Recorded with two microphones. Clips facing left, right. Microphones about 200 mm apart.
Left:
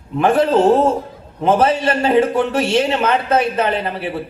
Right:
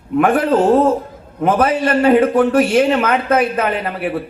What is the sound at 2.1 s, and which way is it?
Speech, 55° right (ahead or behind).